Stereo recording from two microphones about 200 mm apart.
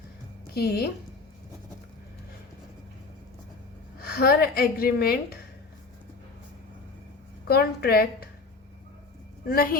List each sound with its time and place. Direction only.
0.5 s speech: 50° left (ahead or behind)
4.0 s speech: 50° left (ahead or behind)
7.4 s speech: 50° left (ahead or behind)
9.5 s speech: 45° left (ahead or behind)